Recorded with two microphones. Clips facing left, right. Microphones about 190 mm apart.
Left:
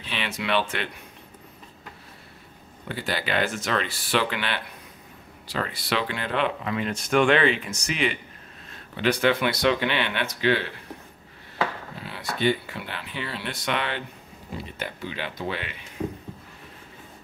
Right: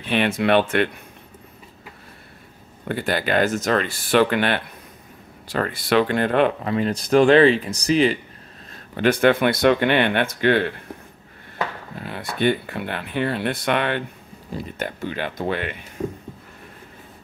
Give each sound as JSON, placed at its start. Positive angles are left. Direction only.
{"t": 0.0, "sound": "speech", "side_deg": -55}
{"t": 2.9, "sound": "speech", "side_deg": -55}
{"t": 6.7, "sound": "speech", "side_deg": -35}
{"t": 8.9, "sound": "speech", "side_deg": -50}
{"t": 11.9, "sound": "speech", "side_deg": -50}